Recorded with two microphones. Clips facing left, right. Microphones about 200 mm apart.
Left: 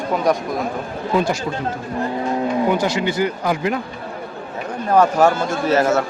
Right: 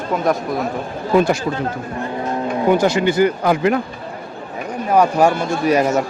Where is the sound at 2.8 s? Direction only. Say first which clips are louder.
Right 4 dB; 50° right (ahead or behind).